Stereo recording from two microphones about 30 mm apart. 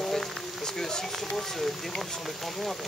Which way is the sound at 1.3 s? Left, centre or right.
Centre.